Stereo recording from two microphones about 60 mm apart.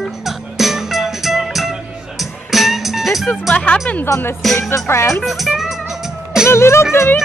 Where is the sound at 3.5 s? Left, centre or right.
Centre.